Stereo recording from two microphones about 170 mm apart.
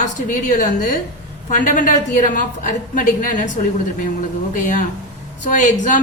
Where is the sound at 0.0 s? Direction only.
50° left (ahead or behind).